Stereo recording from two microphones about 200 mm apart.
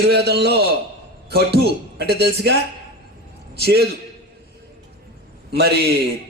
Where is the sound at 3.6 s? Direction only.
55° right (ahead or behind).